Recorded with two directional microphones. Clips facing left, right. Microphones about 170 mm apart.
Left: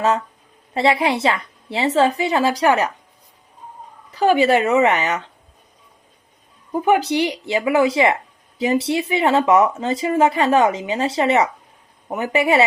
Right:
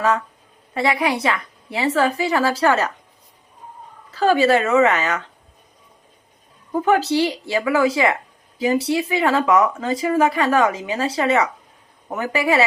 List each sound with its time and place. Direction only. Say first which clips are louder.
0.7 s speech: left 2 dB; 25° left (ahead or behind)
4.1 s speech: left 1 dB; 15° left (ahead or behind)
6.8 s speech: even; 15° left (ahead or behind)